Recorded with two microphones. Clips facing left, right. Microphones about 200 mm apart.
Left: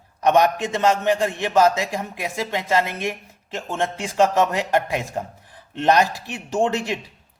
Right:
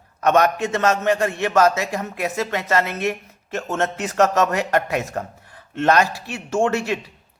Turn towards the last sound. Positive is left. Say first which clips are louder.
# right 1 dB
turn(degrees=15)  # may be behind; listen again after turning